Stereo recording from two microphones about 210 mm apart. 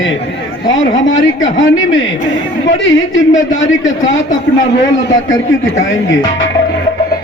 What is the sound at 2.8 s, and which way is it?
A man's voice, 65° left (ahead or behind).